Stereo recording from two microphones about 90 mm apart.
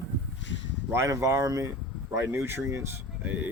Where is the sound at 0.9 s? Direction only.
35° right (ahead or behind).